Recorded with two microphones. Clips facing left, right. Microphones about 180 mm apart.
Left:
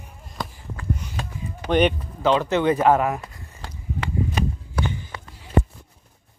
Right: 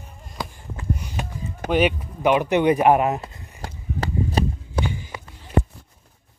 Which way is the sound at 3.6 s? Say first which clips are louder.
Right 2 dB; 40° right (ahead or behind).